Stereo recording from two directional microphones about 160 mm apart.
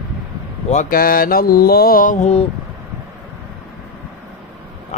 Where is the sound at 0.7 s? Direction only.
55° left (ahead or behind).